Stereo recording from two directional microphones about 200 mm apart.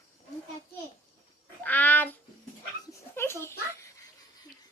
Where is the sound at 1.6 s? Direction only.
10° left (ahead or behind).